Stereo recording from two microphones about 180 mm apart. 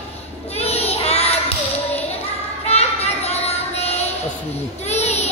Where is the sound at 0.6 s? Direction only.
35° left (ahead or behind).